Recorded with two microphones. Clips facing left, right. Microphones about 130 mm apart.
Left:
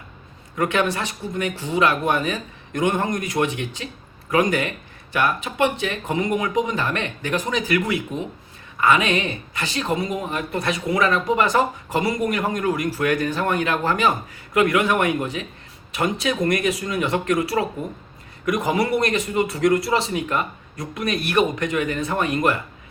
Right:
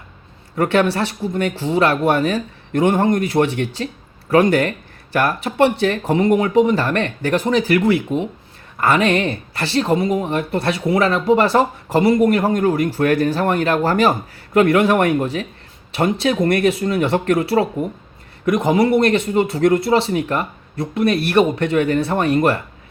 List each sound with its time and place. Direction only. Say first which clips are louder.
0.5 s speech: right 5 dB; 35° right (ahead or behind)